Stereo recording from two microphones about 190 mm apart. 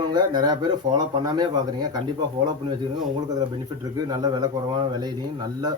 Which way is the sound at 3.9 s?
20° right (ahead or behind).